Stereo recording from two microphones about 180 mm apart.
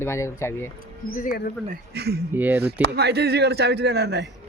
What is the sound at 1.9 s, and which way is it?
Speech, 65° right (ahead or behind).